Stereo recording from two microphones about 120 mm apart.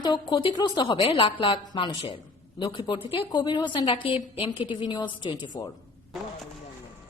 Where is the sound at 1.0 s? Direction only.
50° left (ahead or behind).